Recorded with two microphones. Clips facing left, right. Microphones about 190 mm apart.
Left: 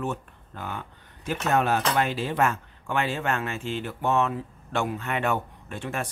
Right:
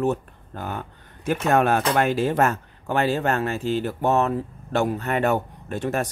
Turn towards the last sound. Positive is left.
turn(degrees=-40)  # may be behind; listen again after turning